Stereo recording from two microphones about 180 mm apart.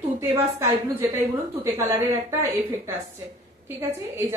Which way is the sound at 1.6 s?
15° right (ahead or behind).